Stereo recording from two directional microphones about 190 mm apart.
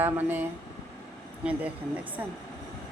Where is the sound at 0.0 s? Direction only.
10° right (ahead or behind).